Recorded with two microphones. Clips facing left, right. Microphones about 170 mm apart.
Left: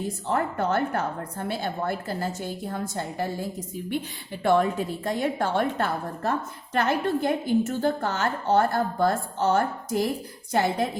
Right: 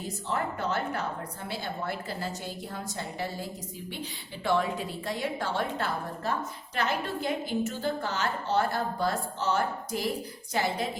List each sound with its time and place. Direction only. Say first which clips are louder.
0.3 s a woman's voice: left 5 dB; 55° left (ahead or behind)
4.4 s a woman's voice: left 6 dB; 50° left (ahead or behind)